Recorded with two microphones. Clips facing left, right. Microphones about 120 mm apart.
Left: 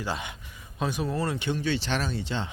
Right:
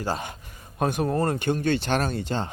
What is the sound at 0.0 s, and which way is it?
Speech, 40° right (ahead or behind).